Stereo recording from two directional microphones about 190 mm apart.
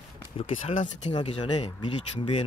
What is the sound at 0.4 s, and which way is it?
Speech, 35° left (ahead or behind).